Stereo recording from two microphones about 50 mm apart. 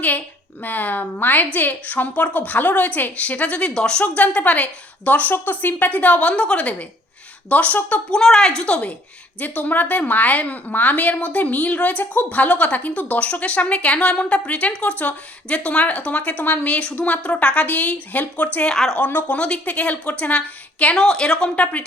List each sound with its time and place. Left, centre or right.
0.6 s a woman's voice: left
8.1 s a woman's voice: centre; by 18.7 s left
18.7 s a woman's voice: centre
18.9 s a woman's voice: left
19.4 s speech: left
20.9 s a woman's voice: centre
21.5 s speech: left